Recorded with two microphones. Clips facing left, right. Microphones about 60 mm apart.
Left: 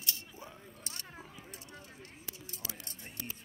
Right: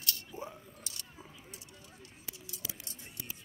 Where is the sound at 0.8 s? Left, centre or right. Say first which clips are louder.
Left 2 dB; left.